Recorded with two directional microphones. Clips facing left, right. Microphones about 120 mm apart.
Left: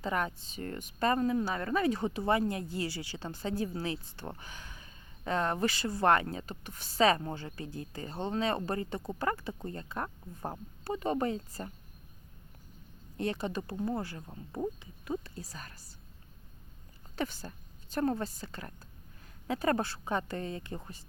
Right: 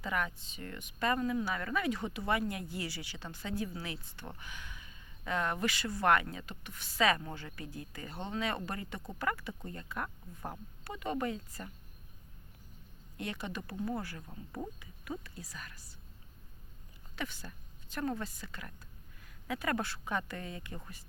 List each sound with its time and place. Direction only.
0.0 s speech: 35° left (ahead or behind)
13.1 s speech: 35° left (ahead or behind)
17.2 s a woman's voice: 35° left (ahead or behind)